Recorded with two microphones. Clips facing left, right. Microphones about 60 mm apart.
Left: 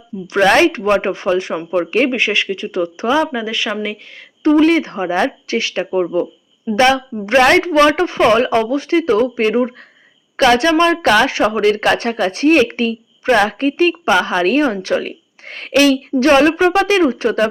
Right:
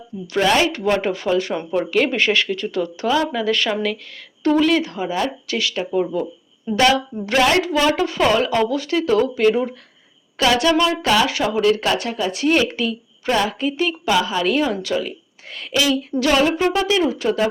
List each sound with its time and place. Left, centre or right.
0.3 s speech: left
2.1 s speech: centre
4.6 s speech: left
7.4 s speech: left
8.0 s speech: left
10.9 s speech: left